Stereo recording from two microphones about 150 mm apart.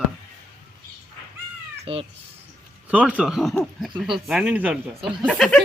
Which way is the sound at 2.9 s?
10° right (ahead or behind).